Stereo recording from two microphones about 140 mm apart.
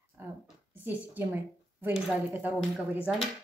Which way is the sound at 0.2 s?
15° right (ahead or behind).